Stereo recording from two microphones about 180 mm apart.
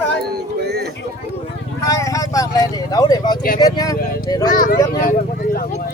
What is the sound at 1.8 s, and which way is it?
Speech, 15° left (ahead or behind).